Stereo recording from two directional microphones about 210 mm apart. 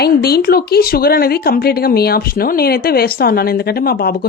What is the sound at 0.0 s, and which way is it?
Speech, 50° left (ahead or behind).